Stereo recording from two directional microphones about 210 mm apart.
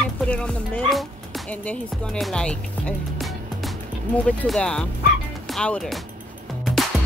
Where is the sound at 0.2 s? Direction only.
5° left (ahead or behind).